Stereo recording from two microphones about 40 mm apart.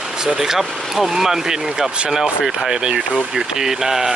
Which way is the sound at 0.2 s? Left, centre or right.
Centre.